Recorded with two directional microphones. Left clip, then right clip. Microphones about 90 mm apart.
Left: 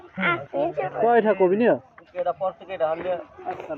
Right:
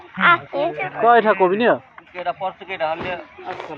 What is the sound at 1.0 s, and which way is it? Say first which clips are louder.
A man's voice: right 5 dB; 20° left (ahead or behind).